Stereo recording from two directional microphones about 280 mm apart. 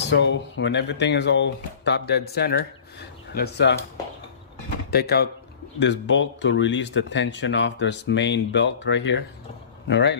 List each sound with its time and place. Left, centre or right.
0.1 s speech: left
4.9 s speech: left